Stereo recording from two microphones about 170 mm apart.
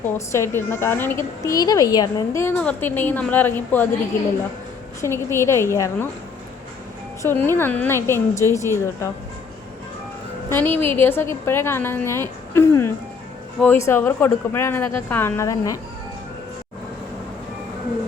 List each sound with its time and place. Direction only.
0.3 s a woman's voice: 15° left (ahead or behind)
4.9 s a woman's voice: 15° left (ahead or behind)
7.2 s a woman's voice: 10° left (ahead or behind)
10.5 s a woman's voice: 10° left (ahead or behind)